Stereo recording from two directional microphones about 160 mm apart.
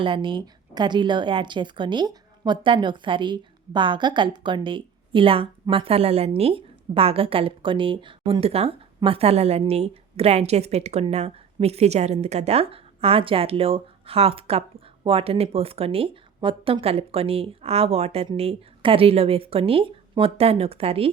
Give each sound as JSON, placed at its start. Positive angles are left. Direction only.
{"t": 0.0, "sound": "a woman's voice", "side_deg": -30}